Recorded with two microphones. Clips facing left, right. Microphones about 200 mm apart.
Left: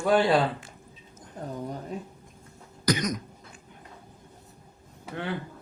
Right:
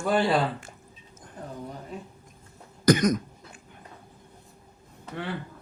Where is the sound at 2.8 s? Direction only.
50° right (ahead or behind).